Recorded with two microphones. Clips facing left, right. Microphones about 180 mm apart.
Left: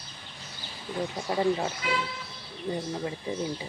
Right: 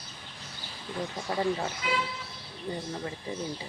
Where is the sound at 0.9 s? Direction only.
10° left (ahead or behind).